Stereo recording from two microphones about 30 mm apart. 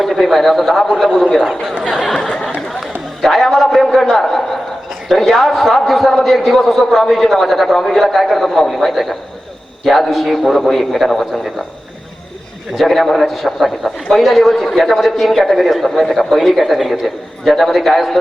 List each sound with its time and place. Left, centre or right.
0.0 s a man's voice: centre
3.2 s a sound: centre
6.5 s a man's voice: centre
12.7 s a man's voice: centre